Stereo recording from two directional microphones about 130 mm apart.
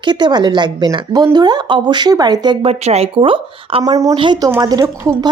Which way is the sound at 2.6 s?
55° right (ahead or behind).